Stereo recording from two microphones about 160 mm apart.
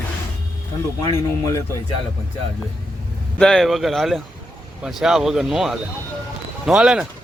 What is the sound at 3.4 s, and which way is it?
Speech, centre (ahead or behind).